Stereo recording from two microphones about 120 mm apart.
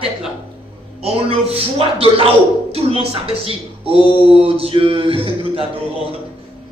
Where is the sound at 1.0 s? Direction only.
55° right (ahead or behind).